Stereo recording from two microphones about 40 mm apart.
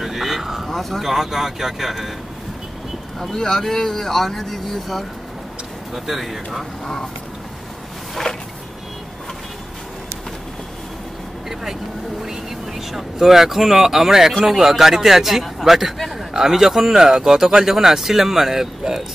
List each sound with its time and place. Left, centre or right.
0.0 s a sound: centre
0.7 s speech: centre
3.2 s speech: centre
6.0 s speech: centre
8.3 s a sound: left
12.9 s speech: centre